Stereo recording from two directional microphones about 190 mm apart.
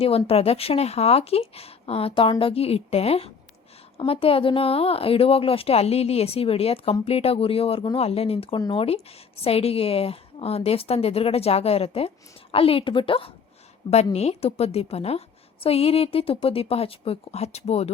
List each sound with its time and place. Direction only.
0.3 s a woman's voice: 30° left (ahead or behind)